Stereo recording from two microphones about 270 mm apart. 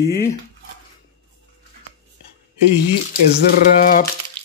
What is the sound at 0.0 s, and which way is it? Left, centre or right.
Speech, left.